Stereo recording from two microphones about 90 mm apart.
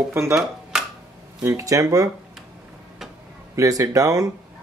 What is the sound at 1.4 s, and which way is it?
Speech, 35° right (ahead or behind).